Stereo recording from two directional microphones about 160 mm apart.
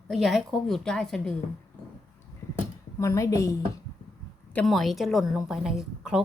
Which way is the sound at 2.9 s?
20° left (ahead or behind).